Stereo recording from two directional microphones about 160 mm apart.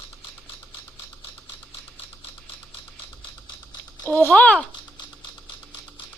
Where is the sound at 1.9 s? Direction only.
35° left (ahead or behind).